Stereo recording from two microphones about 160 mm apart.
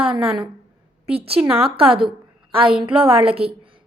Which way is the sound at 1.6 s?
35° right (ahead or behind).